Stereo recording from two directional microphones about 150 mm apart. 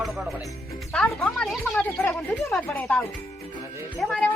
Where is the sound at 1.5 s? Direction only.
5° left (ahead or behind).